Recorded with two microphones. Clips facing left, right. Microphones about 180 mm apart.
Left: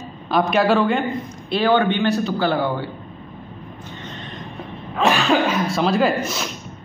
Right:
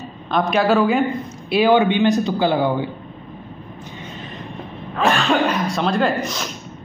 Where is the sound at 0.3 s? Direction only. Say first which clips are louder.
Even; centre (ahead or behind); by 2.9 s 15° right (ahead or behind).